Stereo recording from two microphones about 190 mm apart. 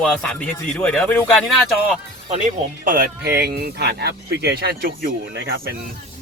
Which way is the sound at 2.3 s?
40° right (ahead or behind).